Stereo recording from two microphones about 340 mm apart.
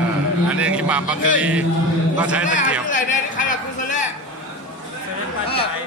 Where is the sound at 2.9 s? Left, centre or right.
Left.